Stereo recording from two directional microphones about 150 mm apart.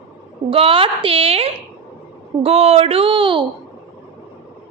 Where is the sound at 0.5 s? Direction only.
40° right (ahead or behind).